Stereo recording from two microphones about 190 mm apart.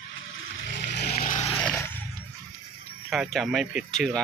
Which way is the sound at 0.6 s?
65° left (ahead or behind).